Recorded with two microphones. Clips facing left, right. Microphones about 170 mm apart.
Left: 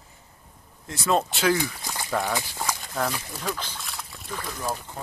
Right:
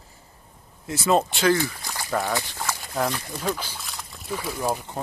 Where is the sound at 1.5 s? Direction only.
15° left (ahead or behind).